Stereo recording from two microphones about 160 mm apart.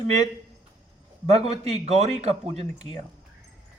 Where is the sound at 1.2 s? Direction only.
45° right (ahead or behind).